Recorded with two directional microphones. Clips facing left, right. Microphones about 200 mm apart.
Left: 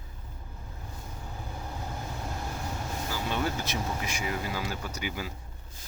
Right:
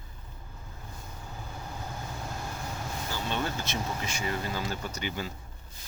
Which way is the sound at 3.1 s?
10° left (ahead or behind).